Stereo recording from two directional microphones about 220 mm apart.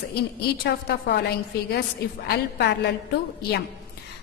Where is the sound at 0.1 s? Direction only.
45° left (ahead or behind).